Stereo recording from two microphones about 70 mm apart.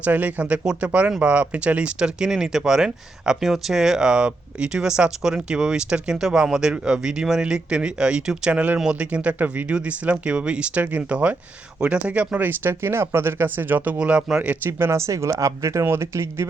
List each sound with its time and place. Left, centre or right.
0.0 s speech: right
14.0 s speech: centre
14.6 s speech: right